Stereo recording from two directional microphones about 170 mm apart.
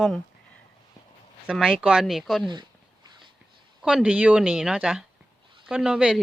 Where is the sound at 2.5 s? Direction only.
25° right (ahead or behind).